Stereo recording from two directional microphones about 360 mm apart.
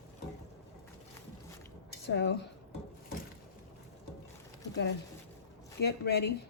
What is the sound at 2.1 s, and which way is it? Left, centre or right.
Speech, left.